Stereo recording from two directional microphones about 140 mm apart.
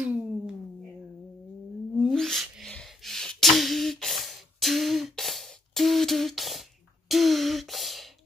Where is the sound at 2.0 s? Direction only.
Centre (ahead or behind).